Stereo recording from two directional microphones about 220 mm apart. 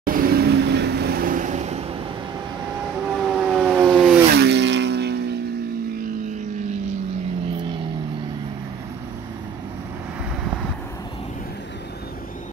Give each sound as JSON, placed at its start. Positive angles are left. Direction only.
{"t": 0.0, "sound": "vehicle", "side_deg": -40}
{"t": 3.0, "sound": "vehicle", "side_deg": -5}
{"t": 4.3, "sound": "a sound", "side_deg": -50}